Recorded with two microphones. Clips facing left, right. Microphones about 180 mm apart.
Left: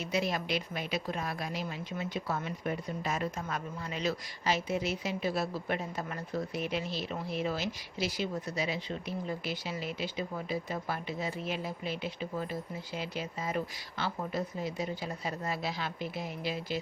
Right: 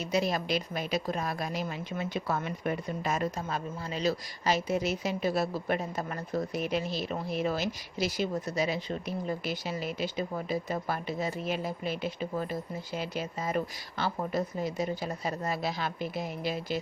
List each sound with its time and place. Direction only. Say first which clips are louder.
0.0 s a woman's voice: right 3 dB; 40° right (ahead or behind)
2.0 s speech: right 3 dB; 65° right (ahead or behind); by 3.4 s 45° right (ahead or behind)
3.5 s a woman's voice: right 3 dB; 35° right (ahead or behind)